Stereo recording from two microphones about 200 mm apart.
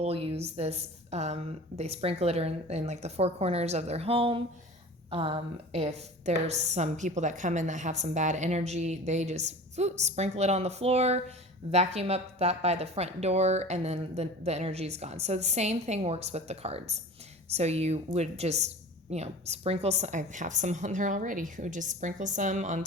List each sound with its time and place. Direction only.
0.0 s a woman's voice: 30° right (ahead or behind)